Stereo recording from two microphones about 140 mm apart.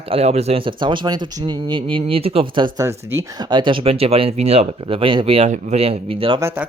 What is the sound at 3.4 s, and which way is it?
Speech, 35° right (ahead or behind).